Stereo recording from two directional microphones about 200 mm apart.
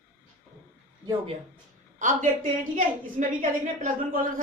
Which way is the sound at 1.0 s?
20° right (ahead or behind).